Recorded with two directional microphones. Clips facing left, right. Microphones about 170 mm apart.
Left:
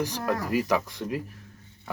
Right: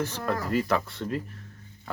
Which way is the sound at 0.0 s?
15° left (ahead or behind).